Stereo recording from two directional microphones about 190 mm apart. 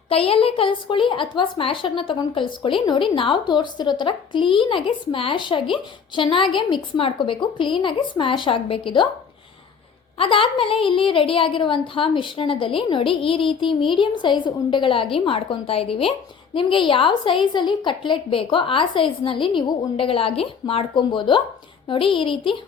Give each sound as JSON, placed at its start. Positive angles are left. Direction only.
{"t": 0.1, "sound": "a woman's voice", "side_deg": 30}
{"t": 10.2, "sound": "a woman's voice", "side_deg": 25}